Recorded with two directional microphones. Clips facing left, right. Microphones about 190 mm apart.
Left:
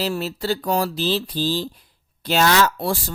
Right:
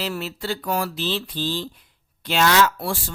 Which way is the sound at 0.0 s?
35° left (ahead or behind).